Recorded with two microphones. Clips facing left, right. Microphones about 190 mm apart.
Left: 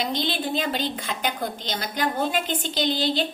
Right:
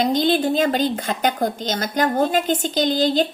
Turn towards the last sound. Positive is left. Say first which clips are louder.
# right 6 dB
turn(degrees=-45)  # may be behind; listen again after turning